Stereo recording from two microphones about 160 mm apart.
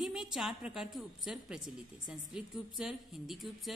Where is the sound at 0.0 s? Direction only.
5° right (ahead or behind).